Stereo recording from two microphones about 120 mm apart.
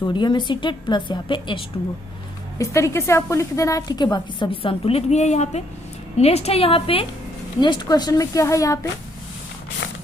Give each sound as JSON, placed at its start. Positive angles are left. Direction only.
{"t": 0.0, "sound": "a woman's voice", "side_deg": 40}
{"t": 2.6, "sound": "a woman's voice", "side_deg": 25}
{"t": 7.6, "sound": "speech", "side_deg": 40}